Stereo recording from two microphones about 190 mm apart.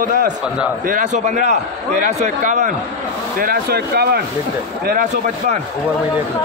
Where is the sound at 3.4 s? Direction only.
50° right (ahead or behind).